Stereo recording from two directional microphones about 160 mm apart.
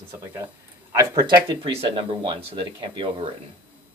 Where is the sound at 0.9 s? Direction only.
20° right (ahead or behind).